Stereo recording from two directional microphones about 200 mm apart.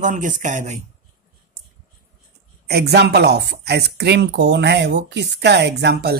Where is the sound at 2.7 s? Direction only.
55° right (ahead or behind).